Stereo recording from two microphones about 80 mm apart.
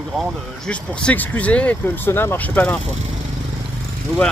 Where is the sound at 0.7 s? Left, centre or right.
Centre.